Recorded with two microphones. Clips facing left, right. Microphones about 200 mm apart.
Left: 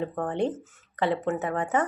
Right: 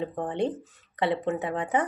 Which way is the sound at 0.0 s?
15° right (ahead or behind).